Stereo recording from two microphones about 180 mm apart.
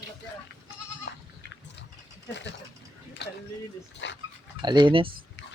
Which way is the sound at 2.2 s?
80° left.